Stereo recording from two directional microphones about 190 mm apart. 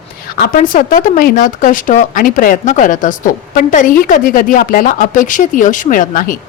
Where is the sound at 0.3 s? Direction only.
50° left (ahead or behind).